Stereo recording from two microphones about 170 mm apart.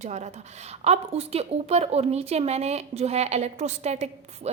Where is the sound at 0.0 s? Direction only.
40° right (ahead or behind).